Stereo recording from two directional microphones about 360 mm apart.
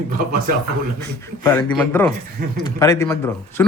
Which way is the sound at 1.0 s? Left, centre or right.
Centre.